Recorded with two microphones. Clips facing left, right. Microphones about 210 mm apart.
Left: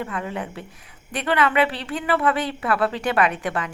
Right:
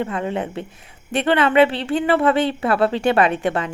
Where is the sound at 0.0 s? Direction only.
25° right (ahead or behind).